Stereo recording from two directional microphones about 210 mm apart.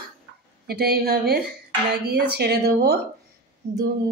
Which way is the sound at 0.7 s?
50° right (ahead or behind).